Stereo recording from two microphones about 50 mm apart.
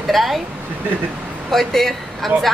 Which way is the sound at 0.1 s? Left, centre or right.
Centre.